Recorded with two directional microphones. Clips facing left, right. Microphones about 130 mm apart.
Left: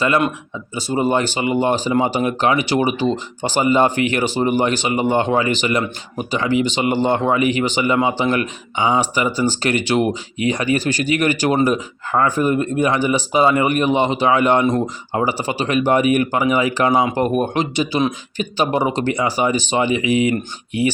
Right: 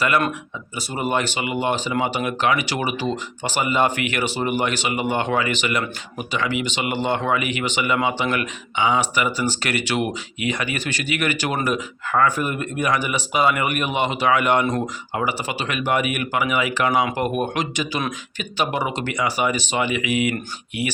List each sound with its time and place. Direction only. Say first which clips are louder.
0.0 s speech: left 3 dB; 30° left (ahead or behind)